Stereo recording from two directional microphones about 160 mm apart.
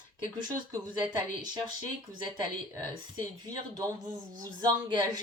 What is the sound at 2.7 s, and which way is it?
Speech, 25° right (ahead or behind).